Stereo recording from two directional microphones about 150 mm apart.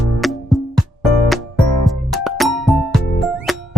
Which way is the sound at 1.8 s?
Centre (ahead or behind).